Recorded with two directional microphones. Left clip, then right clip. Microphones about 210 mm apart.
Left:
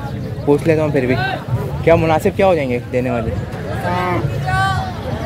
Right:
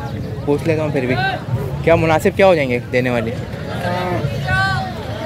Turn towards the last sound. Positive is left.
turn(degrees=45)  # may be behind; listen again after turning